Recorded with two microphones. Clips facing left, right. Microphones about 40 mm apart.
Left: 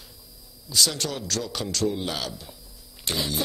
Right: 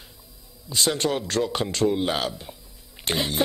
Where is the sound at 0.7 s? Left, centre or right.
Right.